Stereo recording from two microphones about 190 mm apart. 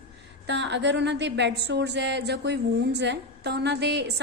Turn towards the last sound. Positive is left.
turn(degrees=-60)  # may be behind; listen again after turning